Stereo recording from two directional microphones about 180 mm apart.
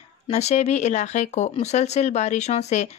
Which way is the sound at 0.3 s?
40° left (ahead or behind).